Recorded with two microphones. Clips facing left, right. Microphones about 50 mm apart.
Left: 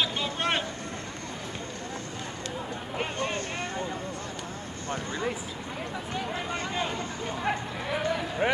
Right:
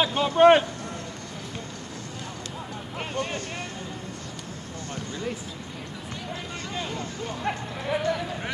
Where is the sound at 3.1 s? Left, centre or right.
Left.